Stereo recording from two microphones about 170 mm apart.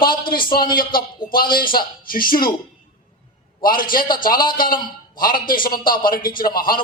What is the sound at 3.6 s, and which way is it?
A man's voice, 55° left (ahead or behind).